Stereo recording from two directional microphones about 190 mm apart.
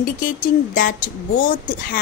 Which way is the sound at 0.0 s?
45° left (ahead or behind).